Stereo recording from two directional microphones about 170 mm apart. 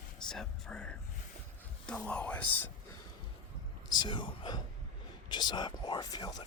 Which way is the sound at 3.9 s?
25° left (ahead or behind).